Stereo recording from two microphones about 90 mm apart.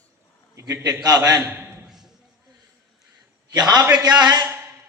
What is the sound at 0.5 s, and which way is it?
Speech, 35° right (ahead or behind).